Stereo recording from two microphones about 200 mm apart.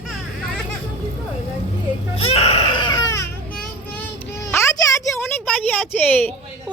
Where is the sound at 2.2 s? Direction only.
30° left (ahead or behind).